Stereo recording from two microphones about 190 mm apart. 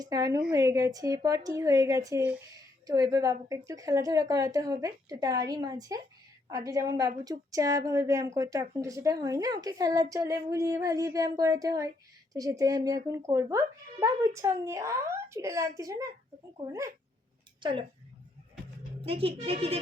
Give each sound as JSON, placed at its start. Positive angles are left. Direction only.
{"t": 0.0, "sound": "a woman's voice", "side_deg": -20}
{"t": 17.6, "sound": "speech", "side_deg": -25}
{"t": 19.0, "sound": "speech", "side_deg": -30}